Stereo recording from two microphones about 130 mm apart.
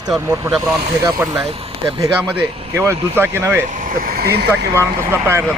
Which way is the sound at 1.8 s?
30° right (ahead or behind).